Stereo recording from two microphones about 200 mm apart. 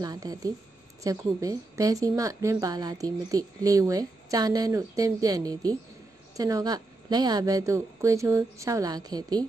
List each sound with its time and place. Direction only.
0.0 s a woman's voice: 20° right (ahead or behind)